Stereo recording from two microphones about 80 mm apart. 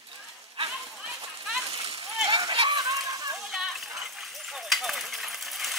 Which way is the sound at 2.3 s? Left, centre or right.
Right.